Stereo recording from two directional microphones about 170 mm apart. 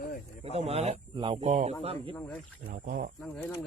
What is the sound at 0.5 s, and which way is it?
Speech, 40° right (ahead or behind).